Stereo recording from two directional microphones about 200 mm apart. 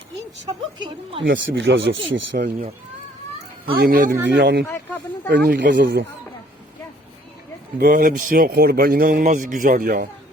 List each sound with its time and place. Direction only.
0.4 s a woman's voice: 20° right (ahead or behind)
1.5 s speech: 65° right (ahead or behind)
3.7 s speech: 50° right (ahead or behind)
4.6 s speech: 10° left (ahead or behind)
5.3 s speech: 55° right (ahead or behind)
7.8 s speech: 45° right (ahead or behind)